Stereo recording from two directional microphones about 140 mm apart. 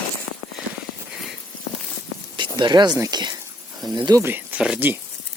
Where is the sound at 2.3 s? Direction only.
35° right (ahead or behind).